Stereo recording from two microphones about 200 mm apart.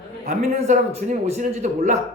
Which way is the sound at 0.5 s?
30° right (ahead or behind).